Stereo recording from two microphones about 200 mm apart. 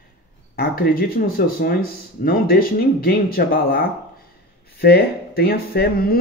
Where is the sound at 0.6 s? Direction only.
50° left (ahead or behind).